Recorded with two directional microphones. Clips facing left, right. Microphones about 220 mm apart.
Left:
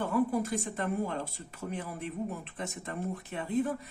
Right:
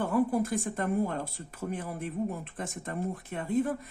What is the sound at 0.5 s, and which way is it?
Speech, 50° right (ahead or behind).